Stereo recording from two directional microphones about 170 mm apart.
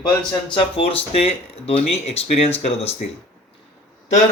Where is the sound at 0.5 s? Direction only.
35° left (ahead or behind).